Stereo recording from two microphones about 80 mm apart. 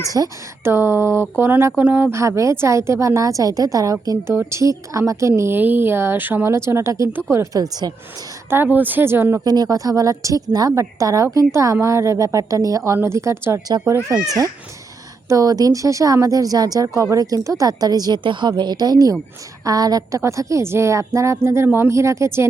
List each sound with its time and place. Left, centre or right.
0.1 s speech: right
0.6 s a woman's voice: right
5.4 s a woman's voice: right
7.5 s speech: right
8.4 s speech: right
9.4 s speech: right
10.7 s a woman's voice: right
15.3 s speech: right
18.2 s a woman's voice: right